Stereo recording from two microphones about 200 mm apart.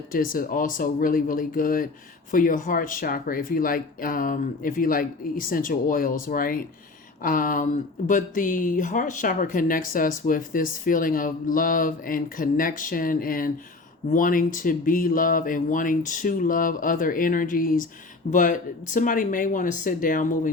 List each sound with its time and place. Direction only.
0.1 s speech: 45° left (ahead or behind)